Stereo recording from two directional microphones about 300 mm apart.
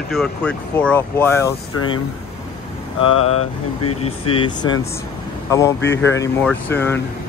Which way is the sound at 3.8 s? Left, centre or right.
Centre.